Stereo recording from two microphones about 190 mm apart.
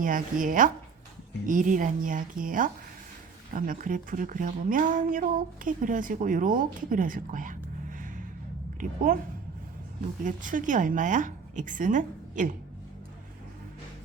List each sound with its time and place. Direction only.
0.0 s speech: 45° right (ahead or behind)
10.2 s speech: 45° right (ahead or behind)